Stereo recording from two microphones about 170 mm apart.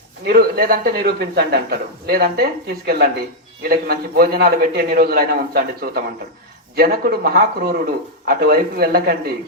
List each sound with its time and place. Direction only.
0.3 s a man's voice: 60° right (ahead or behind)